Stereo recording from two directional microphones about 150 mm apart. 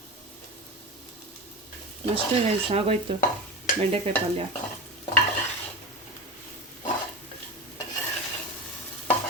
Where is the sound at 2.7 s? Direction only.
40° right (ahead or behind).